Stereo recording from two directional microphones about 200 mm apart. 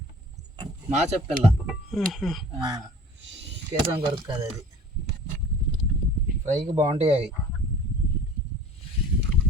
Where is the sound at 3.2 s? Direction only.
60° right (ahead or behind).